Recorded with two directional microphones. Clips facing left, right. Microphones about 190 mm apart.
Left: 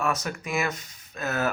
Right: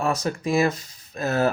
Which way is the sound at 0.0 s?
30° right (ahead or behind).